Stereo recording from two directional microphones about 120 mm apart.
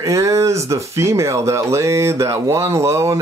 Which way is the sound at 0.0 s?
25° right (ahead or behind).